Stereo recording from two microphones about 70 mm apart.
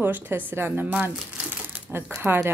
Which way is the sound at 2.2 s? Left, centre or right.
Right.